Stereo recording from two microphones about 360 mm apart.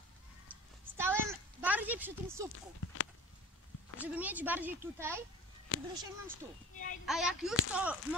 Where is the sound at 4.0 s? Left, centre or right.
Centre.